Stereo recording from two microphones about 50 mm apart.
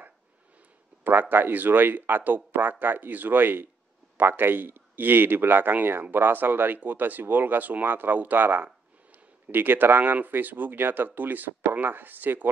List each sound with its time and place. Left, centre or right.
1.3 s a man's voice: right